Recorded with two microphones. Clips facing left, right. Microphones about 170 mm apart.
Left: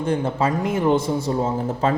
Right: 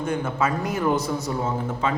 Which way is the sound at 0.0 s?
30° left (ahead or behind).